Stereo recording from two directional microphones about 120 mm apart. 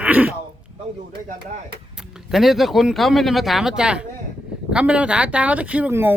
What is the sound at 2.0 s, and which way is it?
Speech, 5° right (ahead or behind).